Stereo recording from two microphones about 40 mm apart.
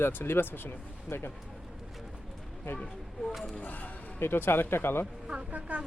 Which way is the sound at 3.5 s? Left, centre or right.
Left.